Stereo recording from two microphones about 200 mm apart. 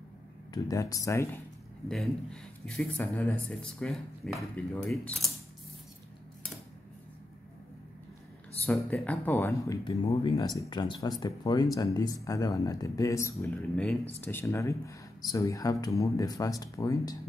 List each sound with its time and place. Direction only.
0.5 s speech: 20° left (ahead or behind)
1.9 s speech: 5° left (ahead or behind)
8.6 s speech: 5° left (ahead or behind)